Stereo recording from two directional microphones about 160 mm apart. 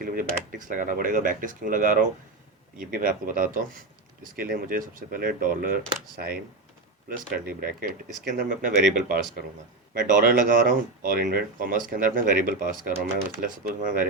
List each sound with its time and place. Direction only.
0.0 s speech: 60° right (ahead or behind)
7.3 s speech: 65° right (ahead or behind)